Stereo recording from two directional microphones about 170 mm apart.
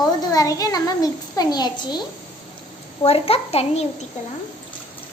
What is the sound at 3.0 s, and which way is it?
Speech, 35° left (ahead or behind).